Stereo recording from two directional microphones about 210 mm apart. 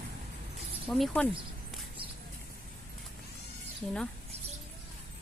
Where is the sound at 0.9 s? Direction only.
5° left (ahead or behind).